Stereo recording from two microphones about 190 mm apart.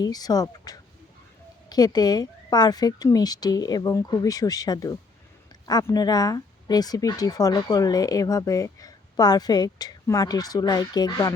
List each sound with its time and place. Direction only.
0.0 s speech: 20° left (ahead or behind)